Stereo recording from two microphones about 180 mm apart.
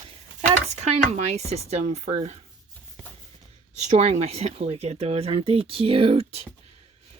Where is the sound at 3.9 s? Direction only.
35° right (ahead or behind).